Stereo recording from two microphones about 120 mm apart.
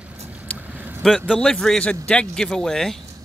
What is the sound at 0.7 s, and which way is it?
Vehicle, 15° right (ahead or behind).